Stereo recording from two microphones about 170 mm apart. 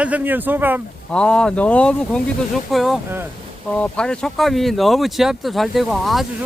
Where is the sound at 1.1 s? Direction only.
5° left (ahead or behind).